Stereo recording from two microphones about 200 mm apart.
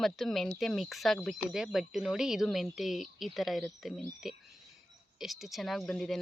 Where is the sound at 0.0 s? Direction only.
Centre (ahead or behind).